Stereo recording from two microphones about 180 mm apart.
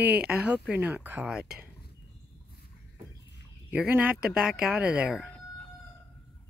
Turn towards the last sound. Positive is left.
turn(degrees=-5)  # may be behind; listen again after turning